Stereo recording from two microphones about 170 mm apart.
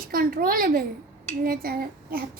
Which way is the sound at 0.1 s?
60° right (ahead or behind).